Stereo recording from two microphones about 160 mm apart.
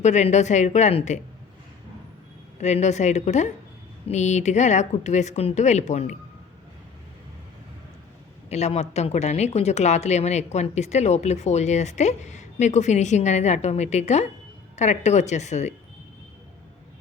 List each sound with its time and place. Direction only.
0.0 s speech: 45° left (ahead or behind)
2.6 s speech: 45° left (ahead or behind)
8.4 s speech: 40° left (ahead or behind)